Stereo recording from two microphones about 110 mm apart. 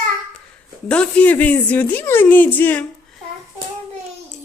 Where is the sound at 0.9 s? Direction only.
10° left (ahead or behind).